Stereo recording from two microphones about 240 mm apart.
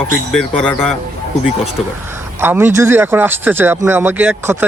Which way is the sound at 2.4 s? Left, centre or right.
Centre.